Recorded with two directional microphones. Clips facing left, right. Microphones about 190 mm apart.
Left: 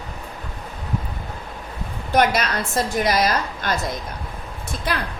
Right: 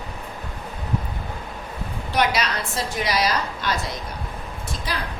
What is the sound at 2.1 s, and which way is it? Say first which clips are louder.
A woman's voice: left 4 dB; 50° left (ahead or behind).